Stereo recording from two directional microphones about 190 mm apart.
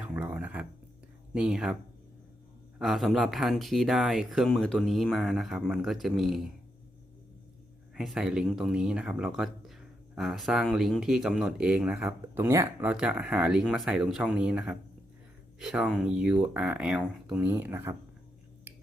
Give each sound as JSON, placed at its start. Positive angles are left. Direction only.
{"t": 0.2, "sound": "a sound", "side_deg": -10}
{"t": 1.3, "sound": "speech", "side_deg": -5}
{"t": 2.7, "sound": "speech", "side_deg": 0}
{"t": 7.9, "sound": "speech", "side_deg": -5}